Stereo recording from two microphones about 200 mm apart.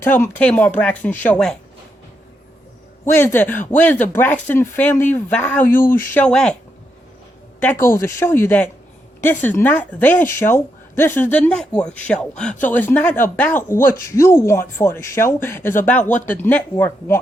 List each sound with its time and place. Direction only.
0.0 s a woman's voice: 10° left (ahead or behind)
3.0 s a woman's voice: 10° left (ahead or behind)
7.6 s a woman's voice: 10° left (ahead or behind)